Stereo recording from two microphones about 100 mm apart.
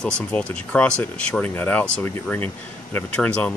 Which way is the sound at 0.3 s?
10° left (ahead or behind).